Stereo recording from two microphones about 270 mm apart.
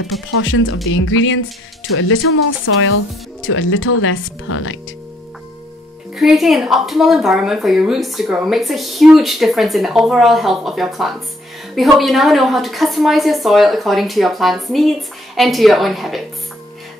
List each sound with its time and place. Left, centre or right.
0.3 s speech: left
6.1 s speech: centre